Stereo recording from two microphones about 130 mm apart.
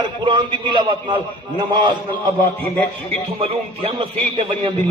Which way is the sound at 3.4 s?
45° right (ahead or behind).